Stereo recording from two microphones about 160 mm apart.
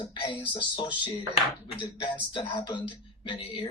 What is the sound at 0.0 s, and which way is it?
Speech, 30° left (ahead or behind).